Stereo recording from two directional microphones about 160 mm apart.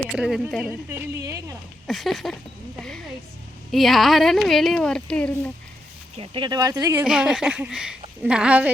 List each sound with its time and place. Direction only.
0.1 s speech: centre (ahead or behind)
0.6 s a woman's voice: 10° right (ahead or behind)
1.9 s speech: centre (ahead or behind)
3.7 s speech: centre (ahead or behind)
6.1 s speech: 30° right (ahead or behind)
7.0 s a woman's voice: 5° right (ahead or behind)